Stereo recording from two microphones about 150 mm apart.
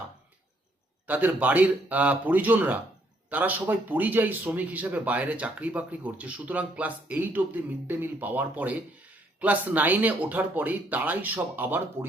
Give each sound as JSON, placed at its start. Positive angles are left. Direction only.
{"t": 1.0, "sound": "speech", "side_deg": -10}